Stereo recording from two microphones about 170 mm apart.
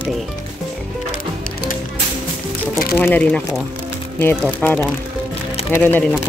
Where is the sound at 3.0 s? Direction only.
10° left (ahead or behind).